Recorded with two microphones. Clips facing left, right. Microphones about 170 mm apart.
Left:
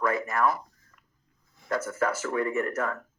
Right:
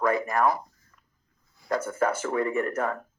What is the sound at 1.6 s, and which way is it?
Speech, 30° right (ahead or behind).